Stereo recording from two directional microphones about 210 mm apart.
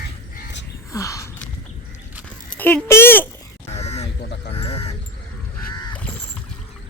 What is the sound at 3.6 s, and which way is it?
Crow, 30° left (ahead or behind).